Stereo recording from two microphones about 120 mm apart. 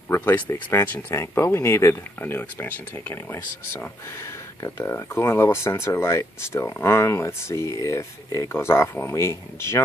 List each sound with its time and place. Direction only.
0.1 s speech: 20° left (ahead or behind)
4.6 s speech: 25° left (ahead or behind)